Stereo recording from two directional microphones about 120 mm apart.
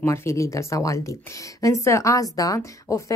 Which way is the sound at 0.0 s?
20° left (ahead or behind).